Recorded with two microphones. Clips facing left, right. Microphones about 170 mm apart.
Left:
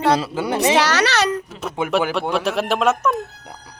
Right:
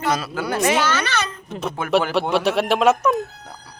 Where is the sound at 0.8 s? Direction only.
80° left.